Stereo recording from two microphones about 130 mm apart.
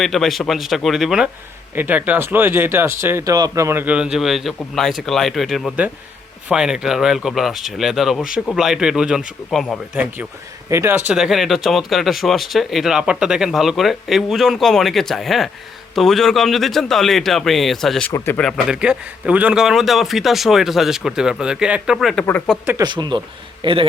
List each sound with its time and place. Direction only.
0.0 s speech: centre (ahead or behind)
1.7 s speech: 15° right (ahead or behind); by 9.8 s 5° left (ahead or behind)
9.9 s speech: 15° right (ahead or behind)
11.1 s speech: centre (ahead or behind)
22.8 s speech: 35° right (ahead or behind)